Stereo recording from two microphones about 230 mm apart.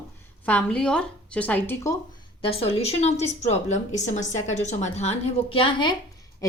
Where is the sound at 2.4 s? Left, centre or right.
Left.